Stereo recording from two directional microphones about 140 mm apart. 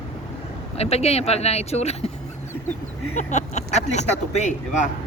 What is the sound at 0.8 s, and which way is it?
Speech, 50° left (ahead or behind).